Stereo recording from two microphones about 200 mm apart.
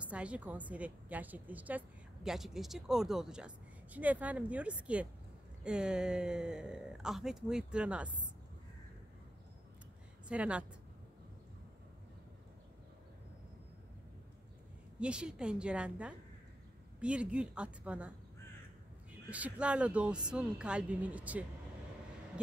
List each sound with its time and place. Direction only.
0.0 s a woman's voice: 5° right (ahead or behind)
10.2 s a woman's voice: 5° right (ahead or behind)
15.0 s speech: 5° right (ahead or behind)
19.3 s speech: 5° right (ahead or behind)